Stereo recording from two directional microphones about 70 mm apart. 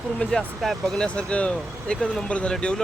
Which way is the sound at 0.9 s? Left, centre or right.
Centre.